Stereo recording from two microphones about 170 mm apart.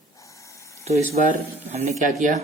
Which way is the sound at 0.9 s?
45° right (ahead or behind).